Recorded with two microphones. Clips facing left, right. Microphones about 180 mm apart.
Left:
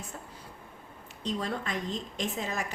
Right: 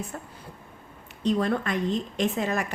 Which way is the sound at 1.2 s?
60° right (ahead or behind).